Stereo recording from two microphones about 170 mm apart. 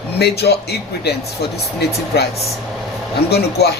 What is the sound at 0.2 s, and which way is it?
Speech, 75° left (ahead or behind).